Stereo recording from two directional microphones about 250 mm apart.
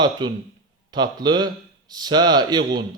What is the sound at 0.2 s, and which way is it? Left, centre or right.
Speech, centre.